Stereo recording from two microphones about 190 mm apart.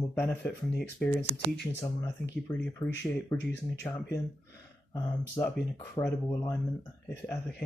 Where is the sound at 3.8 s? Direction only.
15° left (ahead or behind).